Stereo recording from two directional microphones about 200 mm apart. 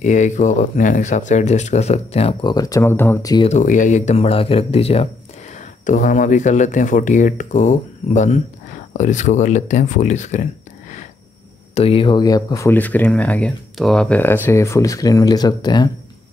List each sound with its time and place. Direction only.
0.0 s speech: 40° left (ahead or behind)
2.5 s speech: 15° left (ahead or behind)
3.4 s speech: 40° left (ahead or behind)
11.7 s speech: 30° left (ahead or behind)